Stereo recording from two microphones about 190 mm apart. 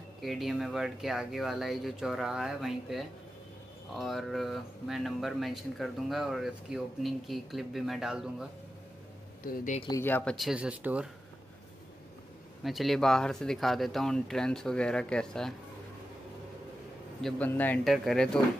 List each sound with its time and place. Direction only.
0.2 s speech: centre (ahead or behind)
9.4 s speech: 45° left (ahead or behind)
9.8 s speech: 15° left (ahead or behind); by 11.1 s 5° right (ahead or behind)
12.6 s speech: centre (ahead or behind)
17.2 s speech: 10° left (ahead or behind)